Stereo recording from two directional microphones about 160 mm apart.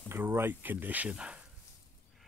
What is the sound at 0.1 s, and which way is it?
Speech, 15° right (ahead or behind).